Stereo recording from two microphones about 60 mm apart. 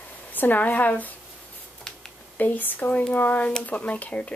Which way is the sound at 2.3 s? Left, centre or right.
Left.